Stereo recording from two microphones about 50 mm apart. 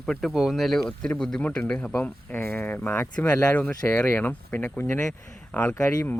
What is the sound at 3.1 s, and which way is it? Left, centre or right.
Speech, left.